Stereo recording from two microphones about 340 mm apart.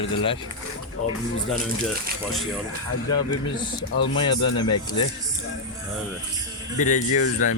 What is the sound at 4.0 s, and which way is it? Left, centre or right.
Speech, centre.